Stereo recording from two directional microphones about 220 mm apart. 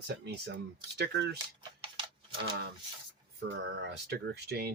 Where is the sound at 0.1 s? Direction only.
50° right (ahead or behind).